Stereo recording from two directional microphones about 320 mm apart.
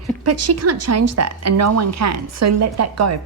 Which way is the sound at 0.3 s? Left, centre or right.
Right.